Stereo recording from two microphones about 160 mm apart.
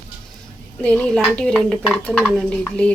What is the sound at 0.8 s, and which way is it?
Speech, 5° left (ahead or behind).